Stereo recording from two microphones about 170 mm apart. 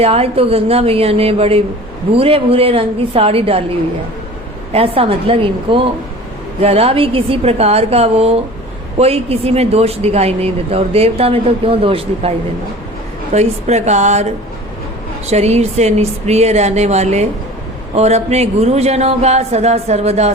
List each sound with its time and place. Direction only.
0.0 s speech: 35° right (ahead or behind)
4.7 s speech: 35° right (ahead or behind)
13.3 s speech: 40° right (ahead or behind)
15.3 s speech: 40° right (ahead or behind)